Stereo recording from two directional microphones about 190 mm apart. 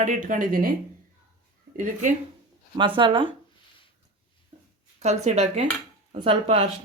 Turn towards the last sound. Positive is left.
turn(degrees=-30)  # may be behind; listen again after turning